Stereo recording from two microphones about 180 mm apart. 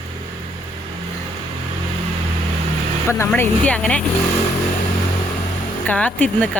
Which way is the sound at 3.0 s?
15° left (ahead or behind).